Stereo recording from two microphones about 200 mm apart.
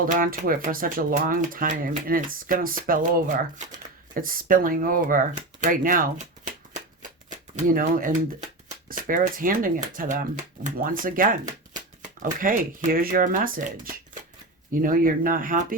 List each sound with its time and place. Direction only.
0.0 s speech: 45° right (ahead or behind)
7.3 s speech: 45° right (ahead or behind)